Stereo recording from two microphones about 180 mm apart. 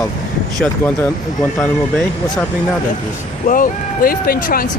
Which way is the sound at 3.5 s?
50° left (ahead or behind).